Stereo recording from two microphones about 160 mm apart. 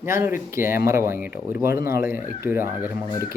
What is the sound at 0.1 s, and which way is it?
A man's voice, 15° right (ahead or behind).